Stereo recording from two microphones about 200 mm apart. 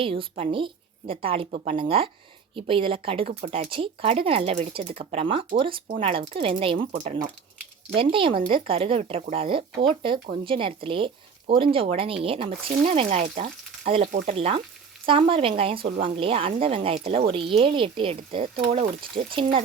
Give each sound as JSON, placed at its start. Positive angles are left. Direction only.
{"t": 0.0, "sound": "speech", "side_deg": -25}
{"t": 8.1, "sound": "speech", "side_deg": -25}